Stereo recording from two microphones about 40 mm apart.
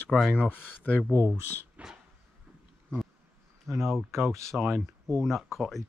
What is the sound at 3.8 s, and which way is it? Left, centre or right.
Speech, centre.